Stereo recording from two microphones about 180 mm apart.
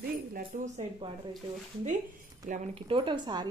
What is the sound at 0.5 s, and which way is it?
Speech, 50° right (ahead or behind).